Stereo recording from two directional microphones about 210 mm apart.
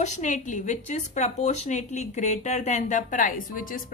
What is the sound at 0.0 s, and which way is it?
A woman's voice, 35° left (ahead or behind).